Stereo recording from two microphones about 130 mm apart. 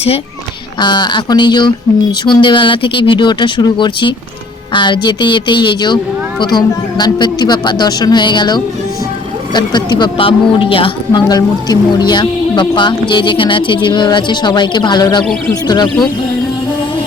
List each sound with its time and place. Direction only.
0.8 s speech: 35° left (ahead or behind)
11.3 s speech: 30° left (ahead or behind)